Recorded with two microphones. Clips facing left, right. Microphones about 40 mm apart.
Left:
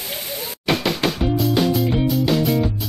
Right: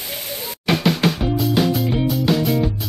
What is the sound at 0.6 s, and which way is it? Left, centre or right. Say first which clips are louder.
Music: right 2 dB; centre.